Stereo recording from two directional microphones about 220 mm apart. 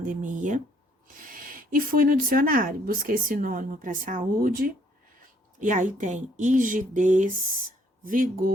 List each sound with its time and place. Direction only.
0.0 s speech: 35° right (ahead or behind)